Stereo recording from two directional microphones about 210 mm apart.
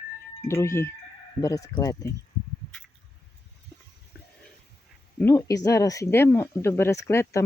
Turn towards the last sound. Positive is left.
turn(degrees=15)  # may be behind; listen again after turning